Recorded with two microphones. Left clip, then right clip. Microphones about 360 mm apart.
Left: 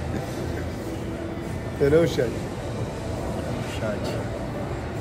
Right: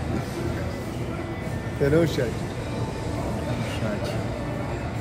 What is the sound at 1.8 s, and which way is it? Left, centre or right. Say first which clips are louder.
Speech: left 2 dB; centre.